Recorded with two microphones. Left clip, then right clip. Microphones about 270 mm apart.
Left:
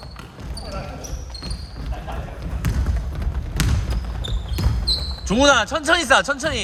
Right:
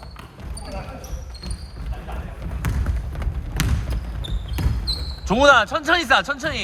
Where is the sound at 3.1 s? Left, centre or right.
Centre.